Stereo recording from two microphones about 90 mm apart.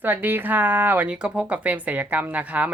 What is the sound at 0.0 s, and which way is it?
Speech, 20° right (ahead or behind).